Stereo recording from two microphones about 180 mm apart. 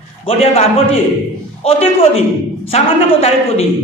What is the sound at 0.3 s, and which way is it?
A man's voice, 35° left (ahead or behind).